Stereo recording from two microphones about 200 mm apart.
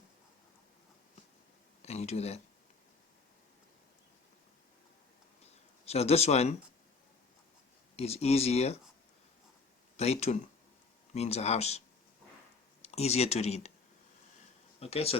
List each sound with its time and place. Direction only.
1.8 s speech: 30° left (ahead or behind)
5.8 s speech: 30° left (ahead or behind)
7.9 s speech: 30° left (ahead or behind)
10.0 s speech: 30° left (ahead or behind)
12.8 s speech: 30° left (ahead or behind)
14.8 s speech: 30° left (ahead or behind)